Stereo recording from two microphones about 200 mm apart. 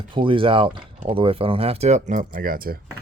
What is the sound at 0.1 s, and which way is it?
Speech, 25° right (ahead or behind).